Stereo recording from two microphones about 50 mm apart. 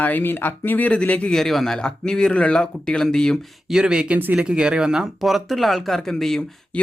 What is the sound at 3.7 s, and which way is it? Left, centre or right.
Speech, centre.